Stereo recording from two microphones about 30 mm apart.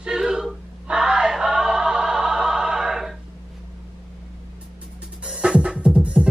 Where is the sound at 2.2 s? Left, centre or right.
Centre.